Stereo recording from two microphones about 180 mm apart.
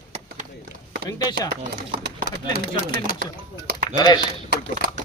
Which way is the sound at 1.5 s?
55° right (ahead or behind).